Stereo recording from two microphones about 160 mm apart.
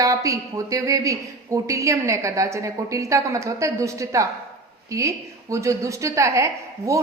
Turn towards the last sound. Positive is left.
turn(degrees=-20)  # may be behind; listen again after turning